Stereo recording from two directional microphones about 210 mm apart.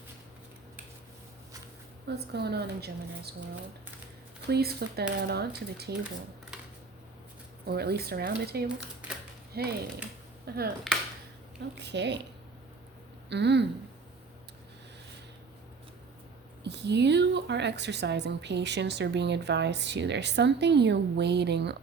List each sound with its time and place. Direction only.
2.0 s a woman's voice: 50° right (ahead or behind)
4.4 s a woman's voice: 50° right (ahead or behind)
7.6 s a woman's voice: 50° right (ahead or behind)
11.7 s a woman's voice: 55° right (ahead or behind)
13.3 s a woman's voice: 55° right (ahead or behind)
16.6 s a woman's voice: 55° right (ahead or behind)